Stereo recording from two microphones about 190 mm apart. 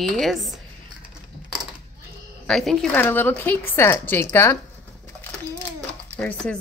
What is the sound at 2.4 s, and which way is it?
Speech, centre (ahead or behind).